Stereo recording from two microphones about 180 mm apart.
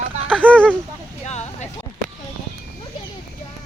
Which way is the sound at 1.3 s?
40° left (ahead or behind).